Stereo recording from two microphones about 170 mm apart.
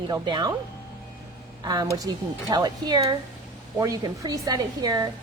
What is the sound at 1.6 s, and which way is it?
A woman's voice, 20° right (ahead or behind).